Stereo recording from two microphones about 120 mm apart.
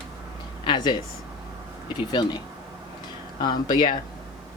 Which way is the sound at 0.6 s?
40° left (ahead or behind).